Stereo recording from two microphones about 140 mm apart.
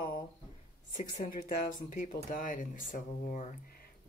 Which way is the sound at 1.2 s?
85° left.